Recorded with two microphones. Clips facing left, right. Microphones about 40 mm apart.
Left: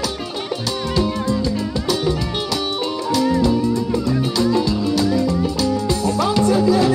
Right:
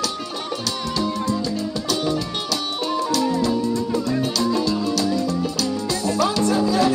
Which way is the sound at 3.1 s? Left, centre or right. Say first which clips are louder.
Left 6 dB; left.